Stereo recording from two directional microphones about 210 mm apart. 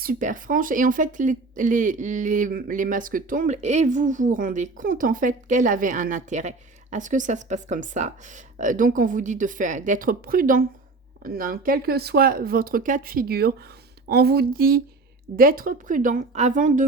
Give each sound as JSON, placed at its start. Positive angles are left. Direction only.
{"t": 0.0, "sound": "speech", "side_deg": -40}